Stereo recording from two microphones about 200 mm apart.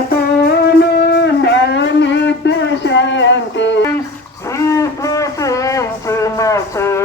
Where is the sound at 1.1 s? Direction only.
60° left (ahead or behind).